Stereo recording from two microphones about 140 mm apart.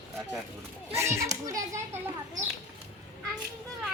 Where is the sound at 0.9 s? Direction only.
20° right (ahead or behind).